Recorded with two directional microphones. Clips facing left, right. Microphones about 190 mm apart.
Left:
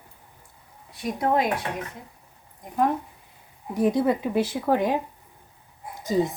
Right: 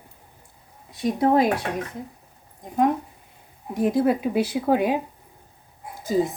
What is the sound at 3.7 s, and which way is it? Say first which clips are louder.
A woman's voice: right 1 dB; centre (ahead or behind).